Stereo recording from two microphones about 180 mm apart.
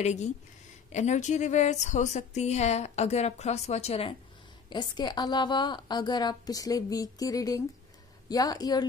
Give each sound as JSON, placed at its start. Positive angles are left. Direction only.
{"t": 0.0, "sound": "speech", "side_deg": 40}
{"t": 4.6, "sound": "a woman's voice", "side_deg": 25}